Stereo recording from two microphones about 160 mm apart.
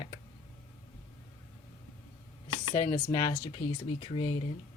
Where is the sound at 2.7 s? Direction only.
25° left (ahead or behind).